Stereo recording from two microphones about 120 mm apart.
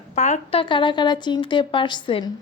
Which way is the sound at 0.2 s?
65° left (ahead or behind).